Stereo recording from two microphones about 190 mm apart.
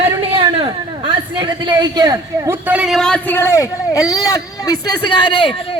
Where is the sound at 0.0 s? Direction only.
30° right (ahead or behind).